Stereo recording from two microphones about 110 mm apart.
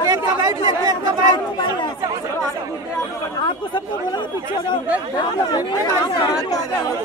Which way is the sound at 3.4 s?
45° left (ahead or behind).